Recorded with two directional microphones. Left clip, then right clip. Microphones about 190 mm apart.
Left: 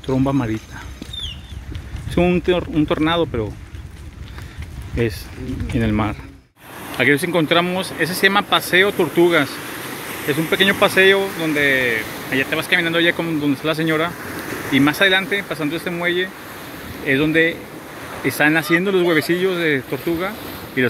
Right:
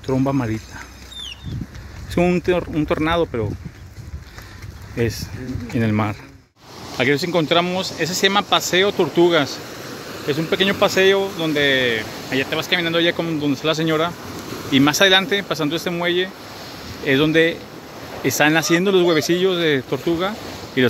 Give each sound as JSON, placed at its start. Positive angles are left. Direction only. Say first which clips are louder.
{"t": 0.0, "sound": "speech", "louder": "left 1 dB", "side_deg": 0}
{"t": 2.0, "sound": "speech", "louder": "left 1 dB", "side_deg": 0}
{"t": 4.9, "sound": "speech", "louder": "left 1 dB", "side_deg": 0}
{"t": 9.9, "sound": "a sound", "louder": "left 1 dB", "side_deg": -15}
{"t": 10.5, "sound": "speech", "louder": "left 2 dB", "side_deg": -5}
{"t": 11.3, "sound": "speech", "louder": "left 1 dB", "side_deg": -15}